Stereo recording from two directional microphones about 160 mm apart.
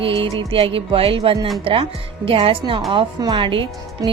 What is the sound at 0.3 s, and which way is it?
A woman's voice, 35° right (ahead or behind).